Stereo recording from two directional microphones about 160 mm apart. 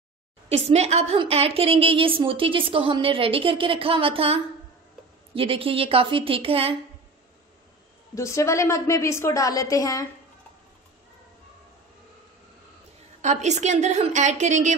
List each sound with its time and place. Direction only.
0.5 s a woman's voice: 40° right (ahead or behind)
8.1 s a woman's voice: 20° left (ahead or behind)
13.2 s a woman's voice: 45° right (ahead or behind)